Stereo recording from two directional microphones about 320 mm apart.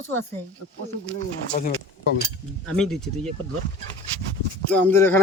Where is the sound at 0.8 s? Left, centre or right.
Centre.